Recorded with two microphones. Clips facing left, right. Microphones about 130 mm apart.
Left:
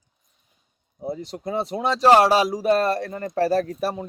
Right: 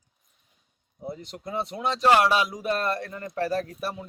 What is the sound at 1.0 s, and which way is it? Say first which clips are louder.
Speech: left 6 dB; 35° left (ahead or behind).